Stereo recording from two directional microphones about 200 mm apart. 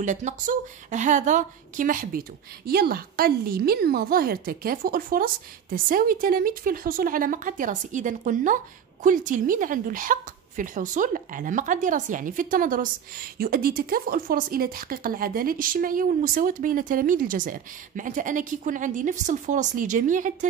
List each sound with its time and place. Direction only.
0.0 s a woman's voice: 35° right (ahead or behind)